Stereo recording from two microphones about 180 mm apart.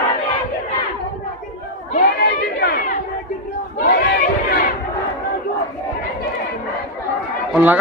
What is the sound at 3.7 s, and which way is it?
Chatter, 55° left (ahead or behind).